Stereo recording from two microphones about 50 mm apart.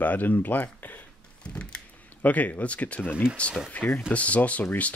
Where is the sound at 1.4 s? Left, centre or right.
Left.